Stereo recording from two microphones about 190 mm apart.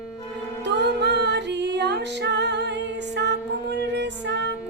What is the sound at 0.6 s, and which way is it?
Music, 65° right (ahead or behind).